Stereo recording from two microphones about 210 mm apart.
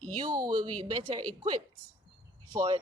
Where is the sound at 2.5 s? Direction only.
20° right (ahead or behind).